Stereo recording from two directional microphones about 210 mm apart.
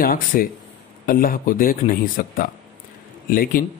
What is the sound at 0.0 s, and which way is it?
A man's voice, 45° left (ahead or behind).